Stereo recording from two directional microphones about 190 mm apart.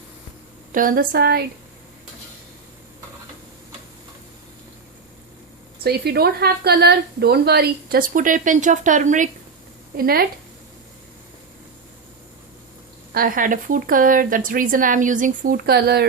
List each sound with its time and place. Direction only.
0.7 s speech: 45° right (ahead or behind)
5.8 s speech: 55° right (ahead or behind)
10.0 s speech: 50° right (ahead or behind)
13.1 s speech: 45° right (ahead or behind)